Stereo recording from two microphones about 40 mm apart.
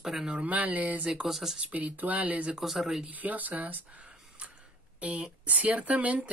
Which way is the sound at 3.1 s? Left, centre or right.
Right.